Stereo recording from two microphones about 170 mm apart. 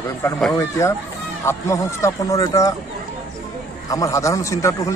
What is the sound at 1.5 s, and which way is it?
Speech, 15° left (ahead or behind).